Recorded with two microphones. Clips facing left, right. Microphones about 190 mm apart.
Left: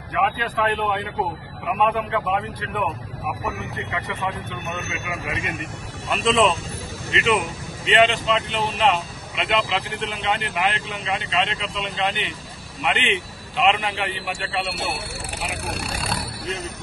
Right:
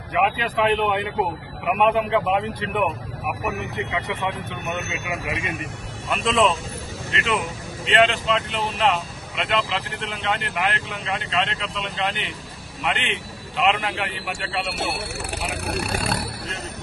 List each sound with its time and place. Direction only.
0.1 s a man's voice: 15° right (ahead or behind)
6.0 s speech: centre (ahead or behind)
15.6 s speech: 60° right (ahead or behind)